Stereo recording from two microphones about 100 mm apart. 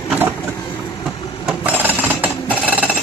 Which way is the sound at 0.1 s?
20° right (ahead or behind).